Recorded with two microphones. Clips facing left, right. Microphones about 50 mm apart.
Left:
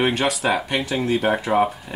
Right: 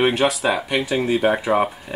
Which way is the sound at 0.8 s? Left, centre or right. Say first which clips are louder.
Right 2 dB; centre.